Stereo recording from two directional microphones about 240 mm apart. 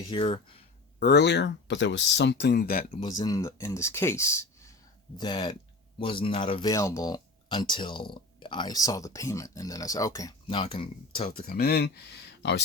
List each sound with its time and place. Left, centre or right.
0.1 s speech: left
0.9 s speech: left
3.0 s speech: centre
11.3 s speech: left